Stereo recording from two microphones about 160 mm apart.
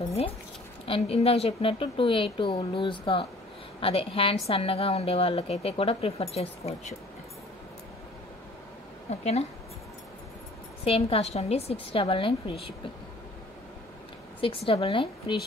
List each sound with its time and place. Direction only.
0.8 s a woman's voice: 40° left (ahead or behind)
9.2 s speech: 45° left (ahead or behind)
10.8 s a woman's voice: 40° left (ahead or behind)
14.7 s a woman's voice: 35° left (ahead or behind)